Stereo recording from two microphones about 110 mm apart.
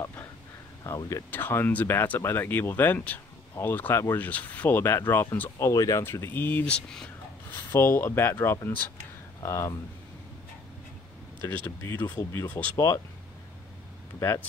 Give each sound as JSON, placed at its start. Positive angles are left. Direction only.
{"t": 0.0, "sound": "a sound", "side_deg": 20}
{"t": 0.9, "sound": "speech", "side_deg": 30}
{"t": 7.5, "sound": "speech", "side_deg": 20}
{"t": 11.4, "sound": "speech", "side_deg": 15}